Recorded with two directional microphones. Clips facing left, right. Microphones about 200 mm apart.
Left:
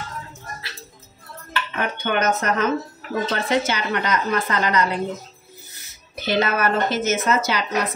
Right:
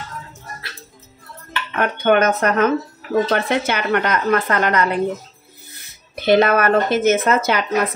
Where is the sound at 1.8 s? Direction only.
55° right (ahead or behind).